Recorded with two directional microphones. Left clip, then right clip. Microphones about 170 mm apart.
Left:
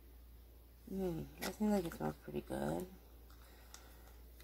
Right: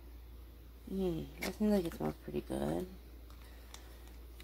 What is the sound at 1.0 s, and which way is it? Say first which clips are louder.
Speech: right 4 dB; 15° right (ahead or behind).